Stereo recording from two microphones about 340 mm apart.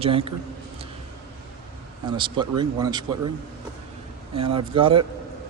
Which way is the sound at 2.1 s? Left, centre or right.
Centre.